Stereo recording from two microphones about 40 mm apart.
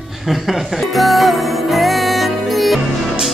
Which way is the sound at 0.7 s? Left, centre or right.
Centre.